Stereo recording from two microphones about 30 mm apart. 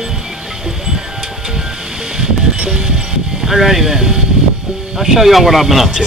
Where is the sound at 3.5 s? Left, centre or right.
Centre.